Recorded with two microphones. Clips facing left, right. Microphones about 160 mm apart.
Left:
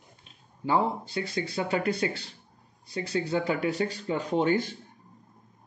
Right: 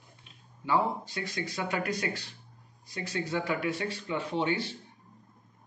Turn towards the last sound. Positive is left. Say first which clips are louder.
# left 5 dB
turn(degrees=45)  # may be behind; listen again after turning